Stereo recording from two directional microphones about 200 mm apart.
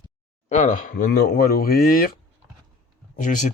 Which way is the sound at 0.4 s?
40° left (ahead or behind).